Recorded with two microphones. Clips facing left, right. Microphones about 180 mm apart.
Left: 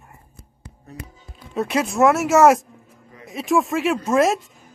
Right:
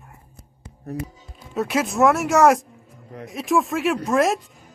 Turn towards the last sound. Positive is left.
turn(degrees=0)  # may be behind; listen again after turning